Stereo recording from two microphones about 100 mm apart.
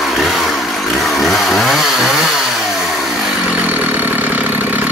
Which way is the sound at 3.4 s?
15° right (ahead or behind).